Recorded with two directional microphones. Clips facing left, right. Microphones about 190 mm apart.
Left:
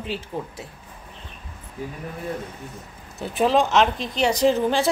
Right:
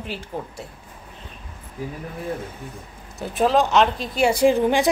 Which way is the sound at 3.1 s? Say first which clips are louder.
Right 1 dB; centre (ahead or behind).